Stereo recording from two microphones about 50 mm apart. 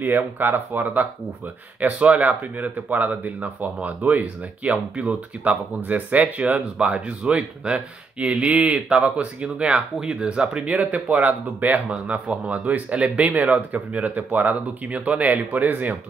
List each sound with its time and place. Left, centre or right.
0.0 s speech: right